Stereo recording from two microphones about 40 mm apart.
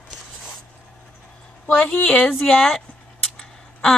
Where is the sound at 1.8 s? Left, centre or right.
Left.